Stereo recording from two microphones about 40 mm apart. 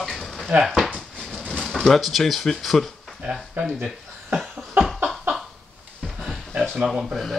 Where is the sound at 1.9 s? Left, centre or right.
Centre.